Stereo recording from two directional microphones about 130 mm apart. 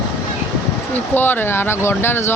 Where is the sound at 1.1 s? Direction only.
15° left (ahead or behind).